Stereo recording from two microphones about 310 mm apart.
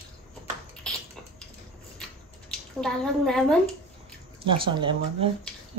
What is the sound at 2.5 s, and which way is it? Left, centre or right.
Speech, centre.